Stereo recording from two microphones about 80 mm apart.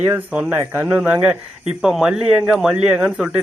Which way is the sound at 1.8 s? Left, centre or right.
Centre.